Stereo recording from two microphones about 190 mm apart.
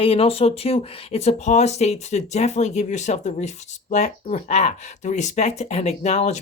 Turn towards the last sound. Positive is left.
turn(degrees=35)  # may be behind; listen again after turning